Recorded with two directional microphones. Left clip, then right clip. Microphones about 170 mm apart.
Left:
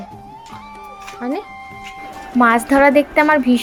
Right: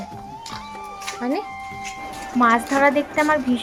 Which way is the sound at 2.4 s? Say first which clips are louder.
Left 4 dB; 30° left (ahead or behind).